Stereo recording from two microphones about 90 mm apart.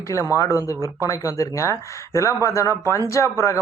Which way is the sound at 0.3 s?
35° left (ahead or behind).